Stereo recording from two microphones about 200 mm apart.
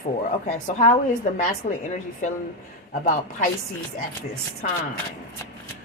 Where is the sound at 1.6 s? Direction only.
35° left (ahead or behind).